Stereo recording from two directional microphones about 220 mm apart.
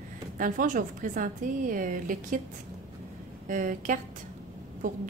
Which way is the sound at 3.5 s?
35° right (ahead or behind).